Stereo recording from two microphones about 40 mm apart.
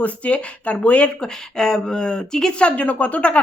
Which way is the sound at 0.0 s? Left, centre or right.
Left.